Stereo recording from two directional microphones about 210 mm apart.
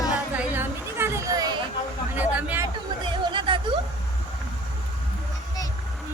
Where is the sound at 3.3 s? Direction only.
25° right (ahead or behind).